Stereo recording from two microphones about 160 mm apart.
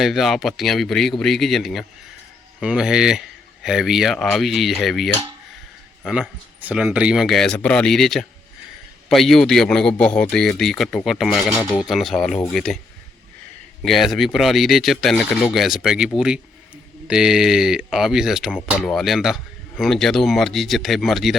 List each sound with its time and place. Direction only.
0.0 s speech: centre (ahead or behind)
13.8 s speech: centre (ahead or behind)